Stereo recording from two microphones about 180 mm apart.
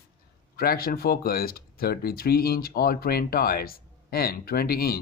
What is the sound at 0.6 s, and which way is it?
Speech, 55° left (ahead or behind).